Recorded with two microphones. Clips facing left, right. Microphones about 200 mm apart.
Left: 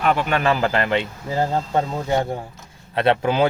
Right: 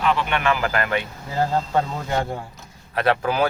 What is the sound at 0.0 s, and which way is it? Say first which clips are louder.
A man's voice: left 2 dB; 45° left (ahead or behind).